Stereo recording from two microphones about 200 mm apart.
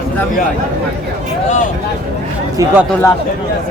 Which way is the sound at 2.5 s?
15° right (ahead or behind).